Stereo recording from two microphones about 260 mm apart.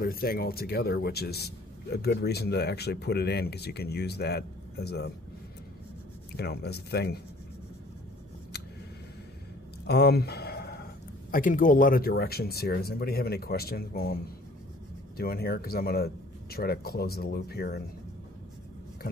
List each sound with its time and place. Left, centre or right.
0.0 s speech: left
6.3 s speech: left
9.8 s a sound: left
11.3 s speech: left